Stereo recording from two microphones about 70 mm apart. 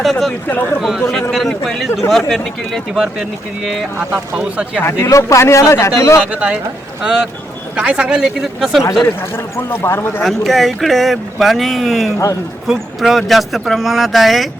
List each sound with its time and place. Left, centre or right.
0.0 s speech: centre
0.4 s speech: left
0.8 s speech: centre
4.8 s speech: left
6.3 s speech: centre
7.8 s speech: centre
9.3 s speech: left
10.2 s speech: centre